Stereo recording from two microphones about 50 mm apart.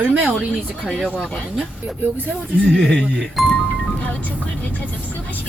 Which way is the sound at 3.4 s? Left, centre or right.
Centre.